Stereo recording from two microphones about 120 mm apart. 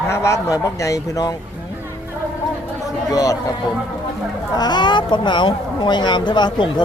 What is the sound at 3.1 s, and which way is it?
Speech, 30° left (ahead or behind).